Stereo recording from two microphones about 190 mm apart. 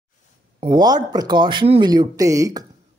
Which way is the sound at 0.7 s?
20° right (ahead or behind).